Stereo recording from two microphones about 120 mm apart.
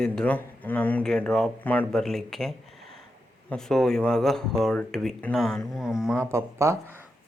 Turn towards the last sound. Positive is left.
turn(degrees=-25)  # may be behind; listen again after turning